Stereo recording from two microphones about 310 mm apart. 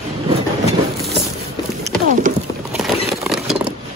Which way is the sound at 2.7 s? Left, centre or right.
Centre.